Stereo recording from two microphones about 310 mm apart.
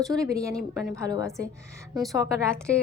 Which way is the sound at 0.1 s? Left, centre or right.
Centre.